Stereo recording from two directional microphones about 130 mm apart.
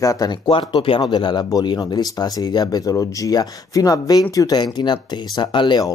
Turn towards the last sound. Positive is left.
turn(degrees=35)  # may be behind; listen again after turning